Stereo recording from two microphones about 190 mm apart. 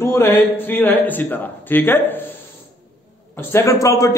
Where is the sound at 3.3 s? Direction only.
15° left (ahead or behind).